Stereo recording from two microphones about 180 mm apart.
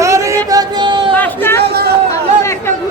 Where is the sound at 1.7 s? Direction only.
60° right (ahead or behind).